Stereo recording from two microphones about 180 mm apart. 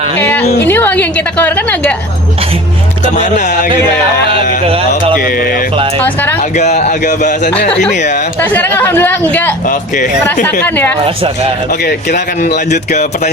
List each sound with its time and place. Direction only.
0.2 s a woman's voice: 10° left (ahead or behind)
3.2 s speech: 45° left (ahead or behind)
5.2 s mantra: 55° left (ahead or behind)
6.0 s music: 10° left (ahead or behind)
6.4 s speech: 40° left (ahead or behind)
8.4 s speech: 10° left (ahead or behind)
9.6 s speech: 45° left (ahead or behind)
10.4 s speech: 10° left (ahead or behind)
11.8 s speech: 65° left (ahead or behind)
12.5 s speech: 40° left (ahead or behind)